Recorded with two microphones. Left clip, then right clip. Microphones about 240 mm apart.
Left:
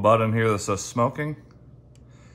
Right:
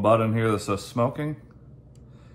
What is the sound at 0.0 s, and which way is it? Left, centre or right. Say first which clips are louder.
Speech: left 2 dB; left.